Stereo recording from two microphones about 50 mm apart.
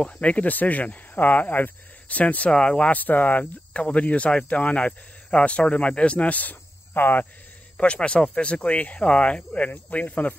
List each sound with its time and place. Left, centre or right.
0.0 s speech: left
6.5 s cricket: left
7.7 s speech: left